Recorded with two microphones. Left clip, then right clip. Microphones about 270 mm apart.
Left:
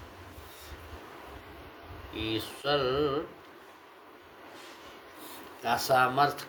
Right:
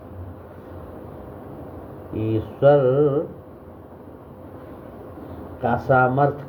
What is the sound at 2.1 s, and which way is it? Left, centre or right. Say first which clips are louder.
Speech: right 8 dB; left.